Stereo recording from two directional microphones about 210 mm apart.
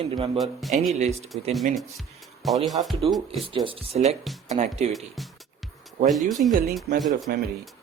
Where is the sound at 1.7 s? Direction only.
Centre (ahead or behind).